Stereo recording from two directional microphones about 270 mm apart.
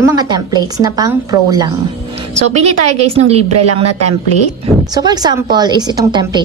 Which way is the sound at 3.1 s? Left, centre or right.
Right.